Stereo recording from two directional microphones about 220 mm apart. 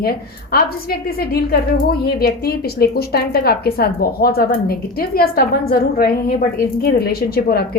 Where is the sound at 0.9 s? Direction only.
45° left (ahead or behind).